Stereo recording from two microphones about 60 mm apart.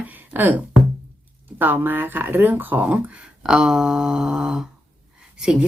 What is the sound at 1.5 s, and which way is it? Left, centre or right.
Speech, right.